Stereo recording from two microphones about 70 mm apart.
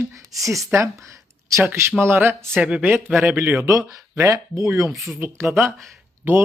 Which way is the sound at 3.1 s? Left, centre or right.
Right.